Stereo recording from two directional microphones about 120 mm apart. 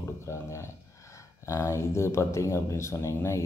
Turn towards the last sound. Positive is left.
turn(degrees=25)  # may be behind; listen again after turning